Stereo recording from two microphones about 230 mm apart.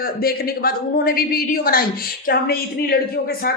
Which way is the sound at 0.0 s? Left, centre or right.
Left.